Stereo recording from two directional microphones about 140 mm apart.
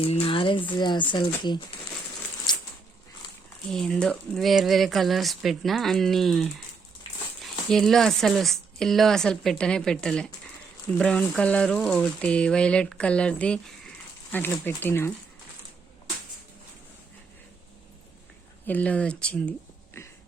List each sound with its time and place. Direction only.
0.0 s speech: 40° left (ahead or behind)
2.5 s a sound: 30° left (ahead or behind)
3.7 s speech: 5° left (ahead or behind)
18.6 s speech: 10° left (ahead or behind)